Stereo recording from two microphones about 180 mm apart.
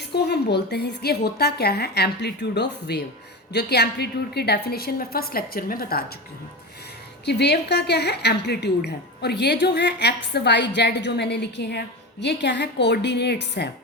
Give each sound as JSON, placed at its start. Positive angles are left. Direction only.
{"t": 0.0, "sound": "a woman's voice", "side_deg": 65}
{"t": 7.3, "sound": "a woman's voice", "side_deg": 70}